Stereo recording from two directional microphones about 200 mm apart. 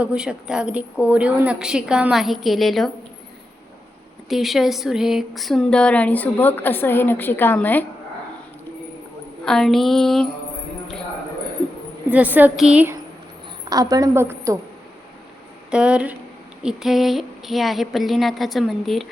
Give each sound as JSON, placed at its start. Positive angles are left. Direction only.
{"t": 0.0, "sound": "a woman's voice", "side_deg": -5}
{"t": 4.3, "sound": "speech", "side_deg": 0}
{"t": 9.4, "sound": "a woman's voice", "side_deg": 0}
{"t": 12.1, "sound": "a woman's voice", "side_deg": -10}
{"t": 13.7, "sound": "a woman's voice", "side_deg": -20}
{"t": 15.7, "sound": "a woman's voice", "side_deg": -5}